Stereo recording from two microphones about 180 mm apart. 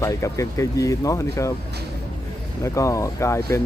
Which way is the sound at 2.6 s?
15° left (ahead or behind).